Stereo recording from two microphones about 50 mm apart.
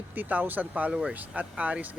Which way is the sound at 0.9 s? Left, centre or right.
Centre.